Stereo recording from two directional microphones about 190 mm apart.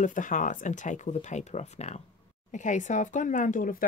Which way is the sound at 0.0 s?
45° left (ahead or behind).